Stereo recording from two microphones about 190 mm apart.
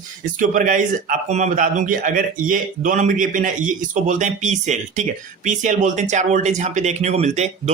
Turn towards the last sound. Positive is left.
turn(degrees=-35)  # may be behind; listen again after turning